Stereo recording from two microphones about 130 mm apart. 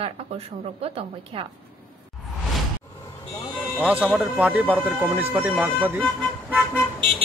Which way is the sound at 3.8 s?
10° right (ahead or behind).